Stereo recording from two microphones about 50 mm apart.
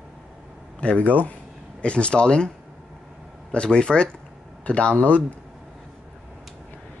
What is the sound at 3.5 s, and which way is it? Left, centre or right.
Speech, centre.